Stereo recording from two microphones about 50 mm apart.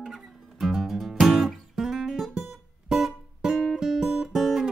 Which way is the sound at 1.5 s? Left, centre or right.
Centre.